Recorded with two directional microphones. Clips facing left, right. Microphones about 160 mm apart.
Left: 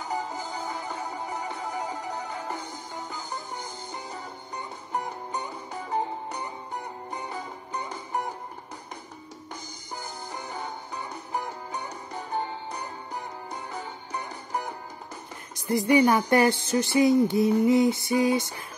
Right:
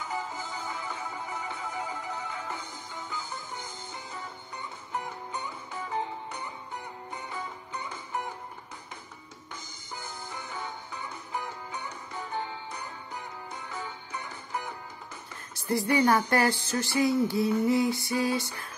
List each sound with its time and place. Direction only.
0.0 s music: 40° left (ahead or behind)
9.9 s music: 40° left (ahead or behind)
15.5 s speech: 20° left (ahead or behind)